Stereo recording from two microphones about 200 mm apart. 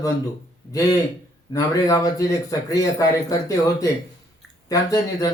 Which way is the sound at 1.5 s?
15° left (ahead or behind).